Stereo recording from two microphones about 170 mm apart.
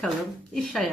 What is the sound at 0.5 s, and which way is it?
Speech, centre (ahead or behind).